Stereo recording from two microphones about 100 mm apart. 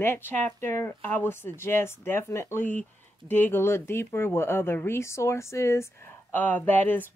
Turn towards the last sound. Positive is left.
turn(degrees=20)  # may be behind; listen again after turning